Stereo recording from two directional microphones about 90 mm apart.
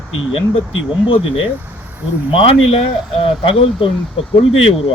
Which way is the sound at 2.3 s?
90° left.